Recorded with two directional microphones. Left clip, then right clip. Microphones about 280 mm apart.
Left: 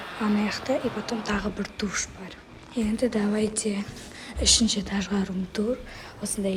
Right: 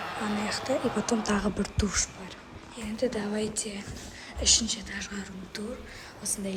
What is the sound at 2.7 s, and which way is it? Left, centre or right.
Speech, centre.